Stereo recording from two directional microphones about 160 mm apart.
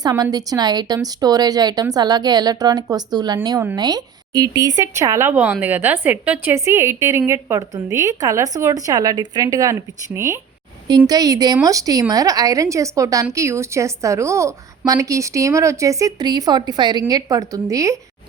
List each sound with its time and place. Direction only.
0.0 s speech: 25° right (ahead or behind)